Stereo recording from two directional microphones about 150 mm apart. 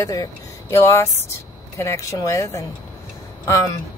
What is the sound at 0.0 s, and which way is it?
A woman's voice, 25° left (ahead or behind).